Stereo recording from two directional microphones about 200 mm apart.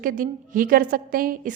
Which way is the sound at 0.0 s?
45° right (ahead or behind).